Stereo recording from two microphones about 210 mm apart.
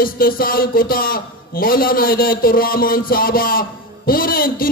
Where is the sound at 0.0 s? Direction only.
45° left (ahead or behind).